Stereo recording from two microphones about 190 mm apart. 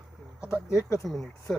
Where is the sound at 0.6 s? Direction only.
15° left (ahead or behind).